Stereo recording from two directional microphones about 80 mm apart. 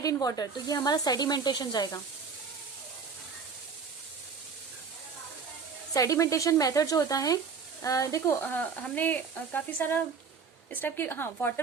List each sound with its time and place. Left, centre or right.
0.0 s speech: left
5.9 s speech: left
8.3 s speech: left